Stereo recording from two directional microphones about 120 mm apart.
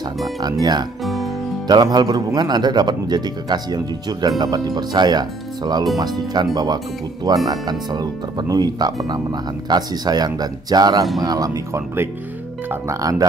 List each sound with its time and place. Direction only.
0.4 s speech: 35° right (ahead or behind)
1.0 s music: centre (ahead or behind)
1.7 s speech: 35° right (ahead or behind)